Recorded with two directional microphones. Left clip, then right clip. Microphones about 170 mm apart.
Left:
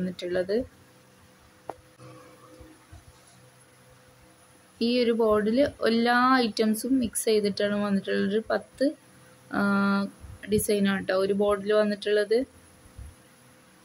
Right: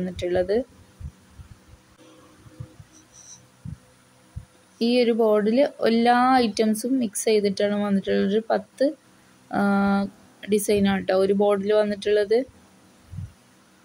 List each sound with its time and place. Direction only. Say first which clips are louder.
0.0 s speech: right 5 dB; 15° right (ahead or behind)
4.7 s speech: right 4 dB; 20° right (ahead or behind)